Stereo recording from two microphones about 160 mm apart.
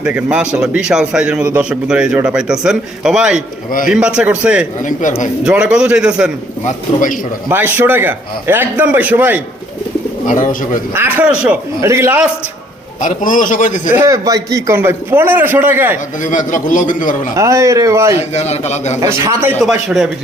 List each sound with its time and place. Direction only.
0.0 s a man's voice: 10° right (ahead or behind)
4.8 s a man's voice: 50° left (ahead or behind)
5.4 s a man's voice: 5° right (ahead or behind)
6.7 s a man's voice: 55° left (ahead or behind)
7.4 s a man's voice: 10° right (ahead or behind)
10.2 s a man's voice: 55° left (ahead or behind)
10.9 s a man's voice: 10° right (ahead or behind)
13.0 s a man's voice: 55° left (ahead or behind)
13.9 s a man's voice: 20° right (ahead or behind)
16.2 s a man's voice: 55° left (ahead or behind)
17.3 s a man's voice: 20° right (ahead or behind)
18.2 s a man's voice: 45° left (ahead or behind)
18.9 s a man's voice: 20° right (ahead or behind)